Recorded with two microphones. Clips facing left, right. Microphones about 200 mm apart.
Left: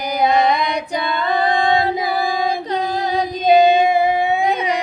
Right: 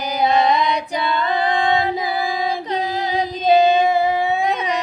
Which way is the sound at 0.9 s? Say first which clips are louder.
Left 3 dB; 35° left (ahead or behind).